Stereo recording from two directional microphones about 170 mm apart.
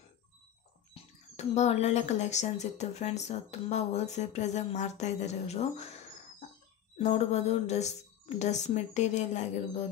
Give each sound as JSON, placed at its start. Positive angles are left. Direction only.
{"t": 1.3, "sound": "speech", "side_deg": 40}
{"t": 7.0, "sound": "speech", "side_deg": 40}